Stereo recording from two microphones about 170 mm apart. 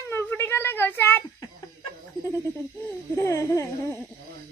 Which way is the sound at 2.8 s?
15° left (ahead or behind).